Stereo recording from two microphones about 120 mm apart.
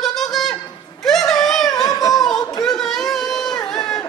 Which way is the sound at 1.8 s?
30° left (ahead or behind).